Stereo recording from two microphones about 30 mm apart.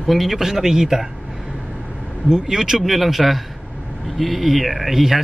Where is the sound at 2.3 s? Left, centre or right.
Right.